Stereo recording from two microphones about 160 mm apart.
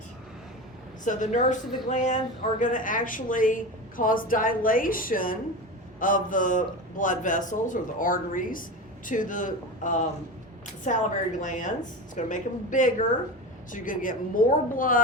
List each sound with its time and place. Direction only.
1.0 s a woman's voice: 50° left (ahead or behind)